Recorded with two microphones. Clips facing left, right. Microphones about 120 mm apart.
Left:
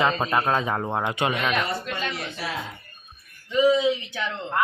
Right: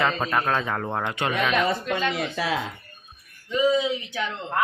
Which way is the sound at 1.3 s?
5° left (ahead or behind).